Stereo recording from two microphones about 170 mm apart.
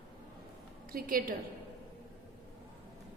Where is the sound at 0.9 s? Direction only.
55° right (ahead or behind).